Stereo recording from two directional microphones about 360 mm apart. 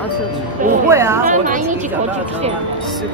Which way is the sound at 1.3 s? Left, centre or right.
Right.